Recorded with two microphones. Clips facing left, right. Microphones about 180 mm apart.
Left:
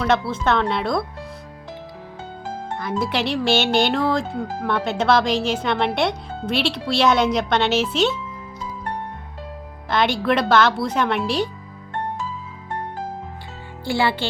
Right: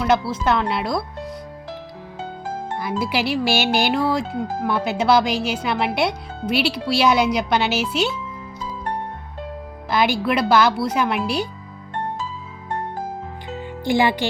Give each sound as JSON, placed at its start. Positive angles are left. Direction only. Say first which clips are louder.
{"t": 0.4, "sound": "speech", "louder": "even", "side_deg": -5}
{"t": 2.7, "sound": "speech", "louder": "even", "side_deg": -10}
{"t": 9.9, "sound": "speech", "louder": "even", "side_deg": -5}
{"t": 13.8, "sound": "speech", "louder": "right 3 dB", "side_deg": -15}